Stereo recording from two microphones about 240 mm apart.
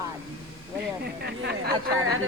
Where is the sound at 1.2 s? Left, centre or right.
Right.